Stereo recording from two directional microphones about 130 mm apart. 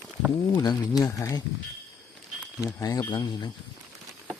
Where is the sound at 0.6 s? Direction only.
30° left (ahead or behind).